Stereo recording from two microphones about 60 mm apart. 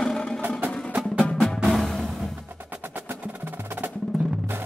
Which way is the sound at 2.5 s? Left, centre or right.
Right.